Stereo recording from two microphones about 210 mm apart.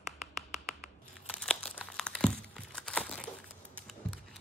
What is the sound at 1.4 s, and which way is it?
Crumpling, 5° left (ahead or behind).